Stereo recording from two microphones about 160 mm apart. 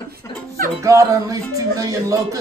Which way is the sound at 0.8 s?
20° right (ahead or behind).